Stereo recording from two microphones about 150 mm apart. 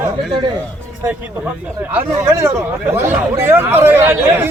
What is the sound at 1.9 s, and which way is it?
Speech, 15° right (ahead or behind).